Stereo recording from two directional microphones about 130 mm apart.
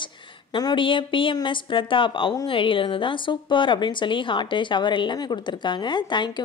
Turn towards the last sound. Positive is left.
turn(degrees=35)  # may be behind; listen again after turning